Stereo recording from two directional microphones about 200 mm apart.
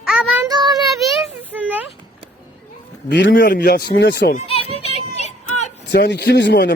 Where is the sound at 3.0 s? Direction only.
65° left (ahead or behind).